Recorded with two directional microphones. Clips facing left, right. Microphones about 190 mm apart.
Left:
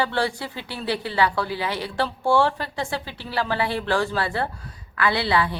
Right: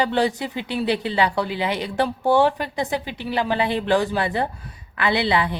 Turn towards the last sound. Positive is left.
turn(degrees=-20)  # may be behind; listen again after turning